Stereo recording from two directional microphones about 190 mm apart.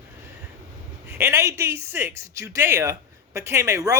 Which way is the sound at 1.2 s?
15° right (ahead or behind).